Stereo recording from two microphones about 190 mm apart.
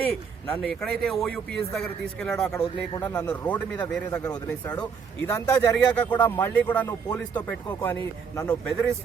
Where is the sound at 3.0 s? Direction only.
20° left (ahead or behind).